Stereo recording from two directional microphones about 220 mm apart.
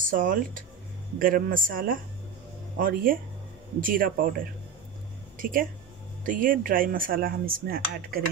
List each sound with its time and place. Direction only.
0.1 s speech: 40° right (ahead or behind)
5.4 s speech: 40° right (ahead or behind)